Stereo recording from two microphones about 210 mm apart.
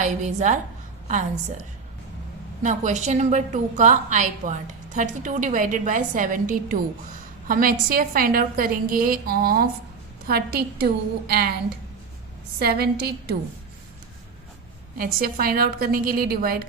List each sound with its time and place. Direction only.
0.0 s a woman's voice: 35° right (ahead or behind)
2.6 s a woman's voice: 35° right (ahead or behind)
12.5 s a woman's voice: 50° right (ahead or behind)
14.9 s a woman's voice: 45° right (ahead or behind)